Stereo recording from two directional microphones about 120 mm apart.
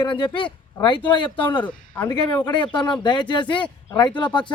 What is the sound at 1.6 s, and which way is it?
Speech, 15° left (ahead or behind).